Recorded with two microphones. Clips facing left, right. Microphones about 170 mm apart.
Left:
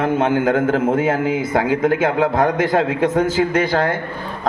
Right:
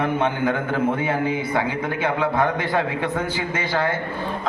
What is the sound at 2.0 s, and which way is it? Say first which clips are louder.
Speech: left 5 dB; 45° left (ahead or behind).